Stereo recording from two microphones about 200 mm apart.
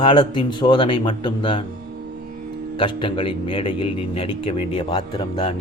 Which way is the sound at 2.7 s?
25° left (ahead or behind).